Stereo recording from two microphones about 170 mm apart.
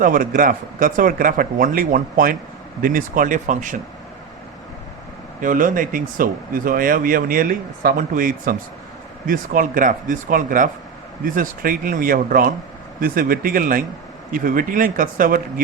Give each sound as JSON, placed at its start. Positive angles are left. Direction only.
{"t": 0.0, "sound": "speech", "side_deg": -55}
{"t": 5.4, "sound": "speech", "side_deg": -50}